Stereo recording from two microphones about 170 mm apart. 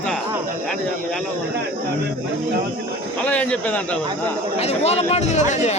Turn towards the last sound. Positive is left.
turn(degrees=45)  # may be behind; listen again after turning